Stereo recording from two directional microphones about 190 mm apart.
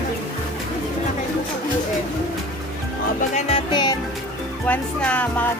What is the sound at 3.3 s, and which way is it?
Music, 30° left (ahead or behind).